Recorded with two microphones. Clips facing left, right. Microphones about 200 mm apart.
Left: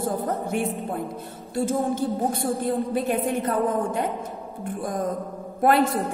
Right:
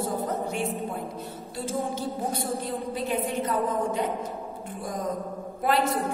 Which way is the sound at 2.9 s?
55° left (ahead or behind).